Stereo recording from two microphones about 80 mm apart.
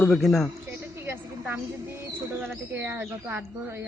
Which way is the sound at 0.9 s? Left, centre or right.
Right.